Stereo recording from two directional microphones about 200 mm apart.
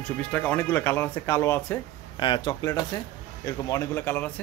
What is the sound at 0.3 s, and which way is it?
A man's voice, 5° left (ahead or behind).